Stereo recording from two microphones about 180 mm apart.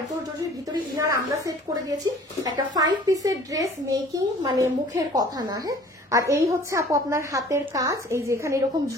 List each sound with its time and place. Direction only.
0.9 s a woman's voice: 20° right (ahead or behind)